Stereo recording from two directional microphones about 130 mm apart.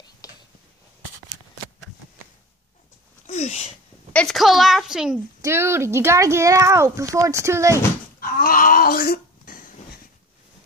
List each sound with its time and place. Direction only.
0.2 s a sound: 25° left (ahead or behind)
3.3 s speech: 55° left (ahead or behind)
4.1 s a woman's voice: 5° left (ahead or behind)
5.4 s speech: 20° right (ahead or behind)
8.2 s speech: 90° left
9.5 s a sound: 90° left